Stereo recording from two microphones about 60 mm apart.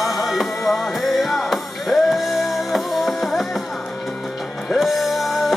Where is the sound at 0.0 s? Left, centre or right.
Centre.